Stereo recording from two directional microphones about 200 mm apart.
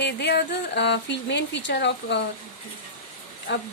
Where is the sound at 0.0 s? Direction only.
55° left (ahead or behind).